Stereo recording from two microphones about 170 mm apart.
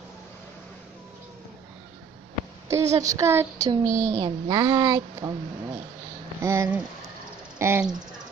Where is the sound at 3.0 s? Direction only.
20° right (ahead or behind).